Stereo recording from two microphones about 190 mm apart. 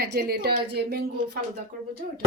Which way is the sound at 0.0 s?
60° right (ahead or behind).